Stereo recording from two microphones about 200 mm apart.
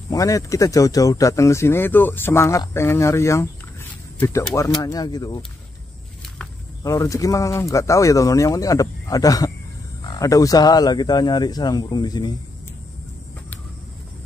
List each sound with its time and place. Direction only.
0.1 s speech: 15° left (ahead or behind)
6.8 s speech: 15° left (ahead or behind)